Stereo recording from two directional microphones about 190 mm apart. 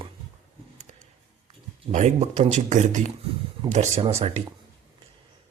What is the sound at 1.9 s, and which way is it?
Speech, 40° right (ahead or behind).